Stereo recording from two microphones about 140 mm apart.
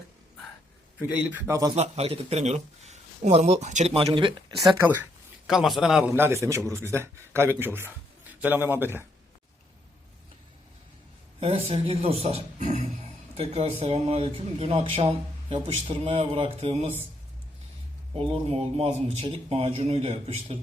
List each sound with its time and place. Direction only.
1.1 s a man's voice: 10° right (ahead or behind)
1.7 s a man's voice: 50° right (ahead or behind)
3.9 s speech: 40° right (ahead or behind)
5.5 s a man's voice: centre (ahead or behind)
11.3 s speech: 40° right (ahead or behind); by 12.8 s 55° right (ahead or behind)
13.3 s speech: 45° right (ahead or behind)
18.1 s speech: 40° right (ahead or behind)